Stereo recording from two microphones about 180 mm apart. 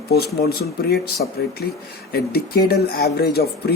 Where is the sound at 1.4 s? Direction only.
65° left (ahead or behind).